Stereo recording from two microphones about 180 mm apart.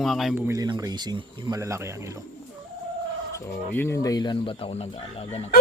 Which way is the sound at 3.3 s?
15° left (ahead or behind).